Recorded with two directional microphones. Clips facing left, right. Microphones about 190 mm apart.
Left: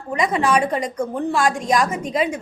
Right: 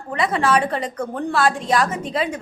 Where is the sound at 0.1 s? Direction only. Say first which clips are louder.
Left 1 dB; 15° left (ahead or behind).